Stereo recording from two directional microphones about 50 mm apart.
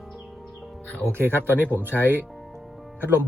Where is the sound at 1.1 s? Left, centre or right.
Right.